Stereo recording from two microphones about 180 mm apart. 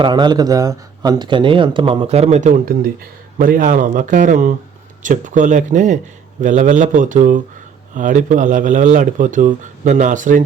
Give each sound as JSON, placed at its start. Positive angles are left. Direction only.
{"t": 0.0, "sound": "a man's voice", "side_deg": -25}